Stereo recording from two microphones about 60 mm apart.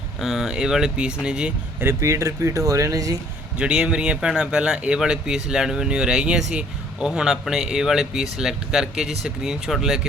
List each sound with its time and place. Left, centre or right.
0.2 s speech: centre
2.0 s speech: right
3.6 s speech: centre